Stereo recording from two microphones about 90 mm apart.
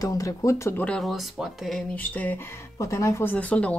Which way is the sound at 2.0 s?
20° left (ahead or behind).